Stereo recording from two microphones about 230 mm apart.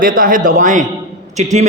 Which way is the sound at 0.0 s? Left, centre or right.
Right.